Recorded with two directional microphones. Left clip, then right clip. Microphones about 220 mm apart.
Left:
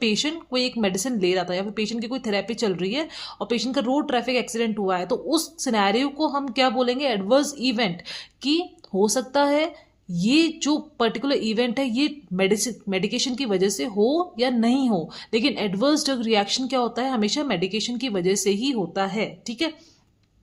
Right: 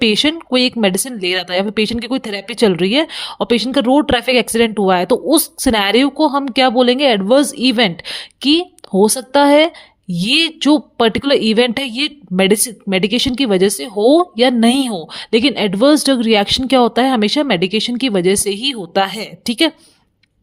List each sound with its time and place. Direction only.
0.0 s a woman's voice: 40° right (ahead or behind)